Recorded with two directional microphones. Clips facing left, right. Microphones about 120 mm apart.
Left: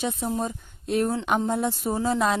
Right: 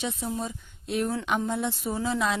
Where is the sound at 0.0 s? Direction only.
45° left (ahead or behind).